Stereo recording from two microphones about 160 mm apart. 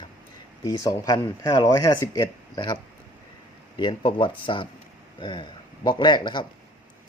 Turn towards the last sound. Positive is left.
turn(degrees=30)  # may be behind; listen again after turning